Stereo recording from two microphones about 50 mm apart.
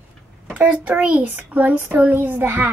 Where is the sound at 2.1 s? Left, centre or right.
Right.